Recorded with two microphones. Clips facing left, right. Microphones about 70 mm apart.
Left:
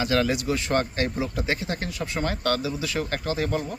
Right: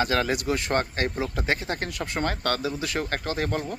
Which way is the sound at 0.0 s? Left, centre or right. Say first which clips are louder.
Left 1 dB; right.